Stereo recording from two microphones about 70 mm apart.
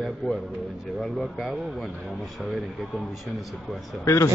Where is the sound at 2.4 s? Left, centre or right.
Centre.